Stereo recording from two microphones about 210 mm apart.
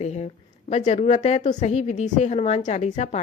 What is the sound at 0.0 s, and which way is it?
A woman's voice, 30° left (ahead or behind).